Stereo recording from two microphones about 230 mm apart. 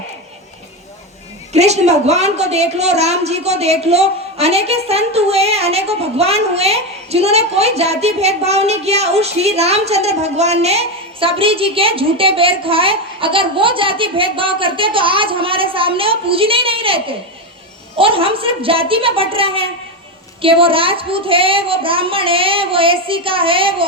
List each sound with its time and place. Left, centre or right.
1.5 s a woman's voice: right